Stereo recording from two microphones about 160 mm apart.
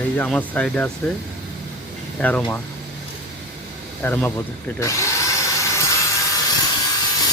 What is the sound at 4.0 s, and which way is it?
Speech, 10° left (ahead or behind).